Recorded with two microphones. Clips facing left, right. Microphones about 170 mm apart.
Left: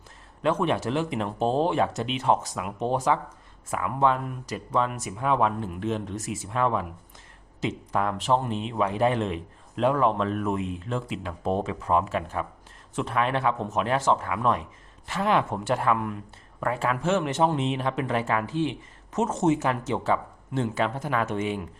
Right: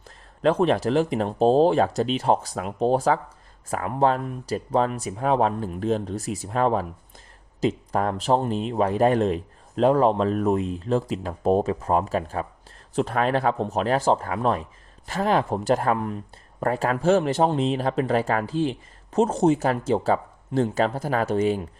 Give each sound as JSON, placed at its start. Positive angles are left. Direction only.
{"t": 0.4, "sound": "speech", "side_deg": -35}